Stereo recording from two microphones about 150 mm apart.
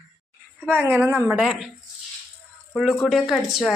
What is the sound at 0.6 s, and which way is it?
A woman's voice, 10° right (ahead or behind).